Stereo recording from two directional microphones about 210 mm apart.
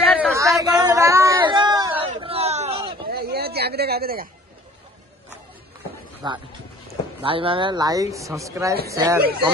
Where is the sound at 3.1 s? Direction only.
50° right (ahead or behind).